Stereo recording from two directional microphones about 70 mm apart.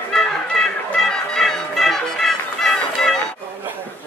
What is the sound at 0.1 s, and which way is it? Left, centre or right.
Music, centre.